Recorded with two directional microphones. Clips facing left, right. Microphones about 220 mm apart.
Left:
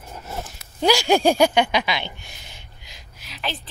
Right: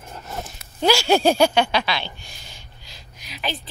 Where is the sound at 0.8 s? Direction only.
15° left (ahead or behind).